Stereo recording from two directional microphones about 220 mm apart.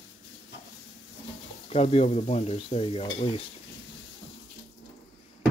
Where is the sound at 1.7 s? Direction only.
25° left (ahead or behind).